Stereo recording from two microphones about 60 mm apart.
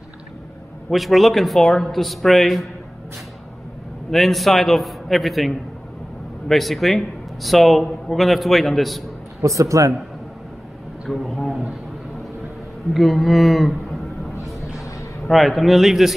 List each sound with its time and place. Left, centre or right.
0.8 s a man's voice: centre
4.1 s a man's voice: centre
6.5 s a man's voice: centre
9.4 s a man's voice: right
11.1 s a man's voice: centre
12.9 s a man's voice: centre
14.3 s a sound: left
15.2 s a man's voice: centre